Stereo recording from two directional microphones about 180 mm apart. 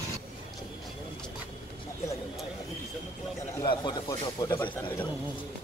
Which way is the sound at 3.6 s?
25° left (ahead or behind).